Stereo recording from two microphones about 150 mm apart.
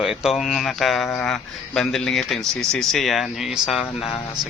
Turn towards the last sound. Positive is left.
turn(degrees=0)  # may be behind; listen again after turning